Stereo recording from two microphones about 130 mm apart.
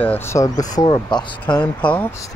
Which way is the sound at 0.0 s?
15° left (ahead or behind).